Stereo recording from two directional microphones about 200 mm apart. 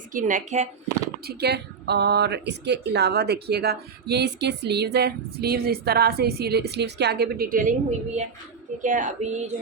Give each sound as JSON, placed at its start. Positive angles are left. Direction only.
{"t": 0.1, "sound": "speech", "side_deg": -40}
{"t": 1.4, "sound": "speech", "side_deg": -55}